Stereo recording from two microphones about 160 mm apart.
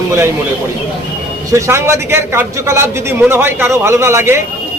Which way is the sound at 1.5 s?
15° right (ahead or behind).